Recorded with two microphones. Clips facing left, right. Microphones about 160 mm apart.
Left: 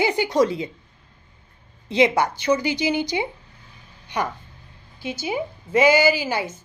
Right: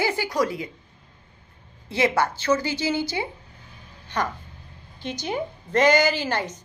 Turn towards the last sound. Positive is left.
turn(degrees=10)  # may be behind; listen again after turning